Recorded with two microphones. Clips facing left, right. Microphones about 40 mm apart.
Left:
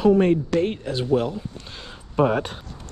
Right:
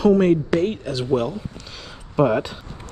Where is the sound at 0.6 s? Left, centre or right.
Left.